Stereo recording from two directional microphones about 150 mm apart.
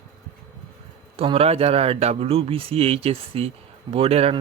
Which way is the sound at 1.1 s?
40° right (ahead or behind).